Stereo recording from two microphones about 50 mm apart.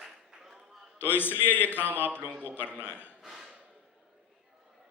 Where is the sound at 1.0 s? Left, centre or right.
Left.